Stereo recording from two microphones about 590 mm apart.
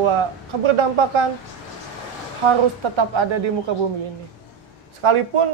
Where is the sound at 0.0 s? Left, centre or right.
Right.